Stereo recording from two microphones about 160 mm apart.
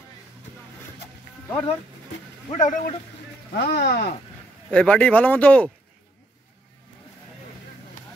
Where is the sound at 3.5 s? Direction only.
90° left.